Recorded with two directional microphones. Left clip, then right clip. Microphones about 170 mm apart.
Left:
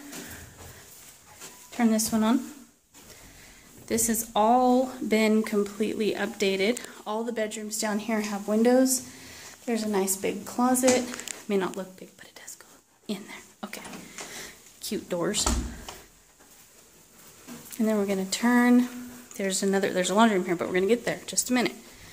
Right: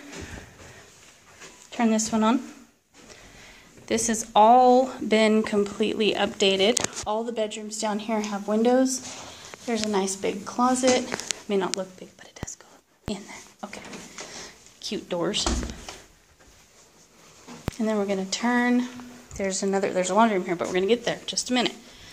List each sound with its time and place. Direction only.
1.8 s speech: 15° left (ahead or behind)
3.8 s speech: 5° left (ahead or behind)
13.3 s dog: 20° left (ahead or behind)
14.3 s a sound: 15° left (ahead or behind)
17.7 s speech: 15° left (ahead or behind)